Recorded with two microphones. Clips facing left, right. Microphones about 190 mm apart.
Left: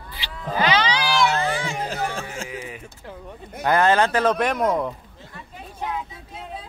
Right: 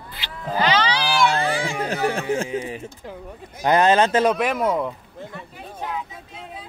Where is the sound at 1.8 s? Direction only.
65° right (ahead or behind).